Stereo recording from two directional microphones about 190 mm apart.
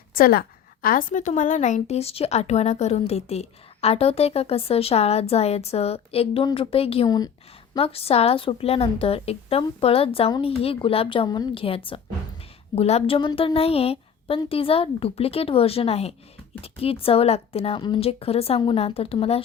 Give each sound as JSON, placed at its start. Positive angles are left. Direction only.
{"t": 0.1, "sound": "a woman's voice", "side_deg": 50}